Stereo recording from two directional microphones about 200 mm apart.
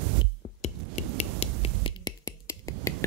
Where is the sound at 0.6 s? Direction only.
35° left (ahead or behind); by 2.9 s 15° left (ahead or behind).